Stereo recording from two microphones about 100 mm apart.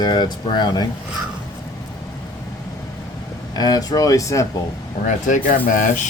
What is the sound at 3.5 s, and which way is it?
Speech, 40° left (ahead or behind).